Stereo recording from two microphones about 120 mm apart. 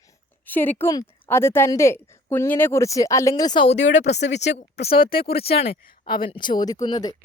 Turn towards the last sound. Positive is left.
turn(degrees=35)  # may be behind; listen again after turning